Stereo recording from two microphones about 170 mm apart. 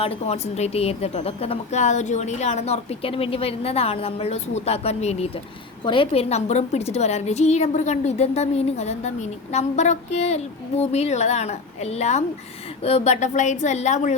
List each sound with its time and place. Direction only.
0.0 s a woman's voice: 40° left (ahead or behind)